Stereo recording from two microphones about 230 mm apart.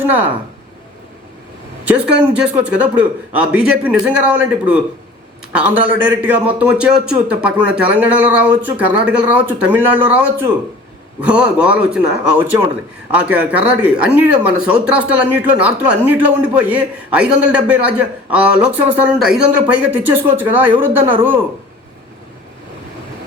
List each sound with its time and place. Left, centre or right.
1.8 s speech: centre